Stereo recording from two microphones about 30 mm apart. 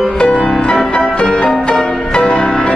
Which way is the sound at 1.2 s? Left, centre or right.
Left.